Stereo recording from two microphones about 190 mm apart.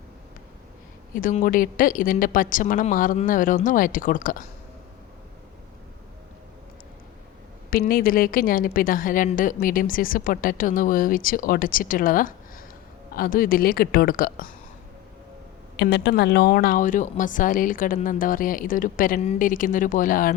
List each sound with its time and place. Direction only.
1.1 s a woman's voice: 45° left (ahead or behind)
7.7 s a woman's voice: 50° left (ahead or behind)
15.8 s a woman's voice: 65° left (ahead or behind); by 20.3 s 45° left (ahead or behind)